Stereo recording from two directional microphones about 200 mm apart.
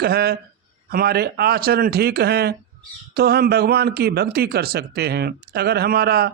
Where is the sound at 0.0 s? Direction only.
50° right (ahead or behind).